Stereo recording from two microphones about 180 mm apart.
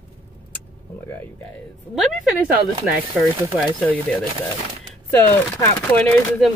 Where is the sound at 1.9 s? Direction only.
5° right (ahead or behind).